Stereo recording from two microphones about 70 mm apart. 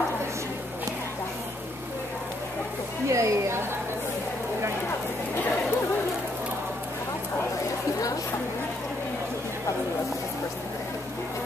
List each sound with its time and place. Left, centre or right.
3.1 s speech: right